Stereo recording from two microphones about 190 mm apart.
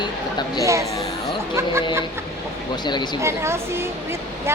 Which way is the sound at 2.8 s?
25° left (ahead or behind).